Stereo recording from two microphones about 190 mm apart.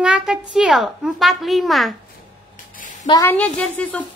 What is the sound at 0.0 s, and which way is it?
A child's voice, 5° right (ahead or behind).